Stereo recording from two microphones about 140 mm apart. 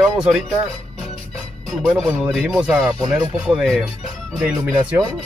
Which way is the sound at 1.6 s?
5° left (ahead or behind).